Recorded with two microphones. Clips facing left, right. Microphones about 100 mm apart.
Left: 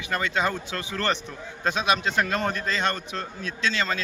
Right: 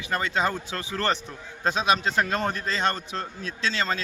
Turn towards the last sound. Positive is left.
turn(degrees=-35)  # may be behind; listen again after turning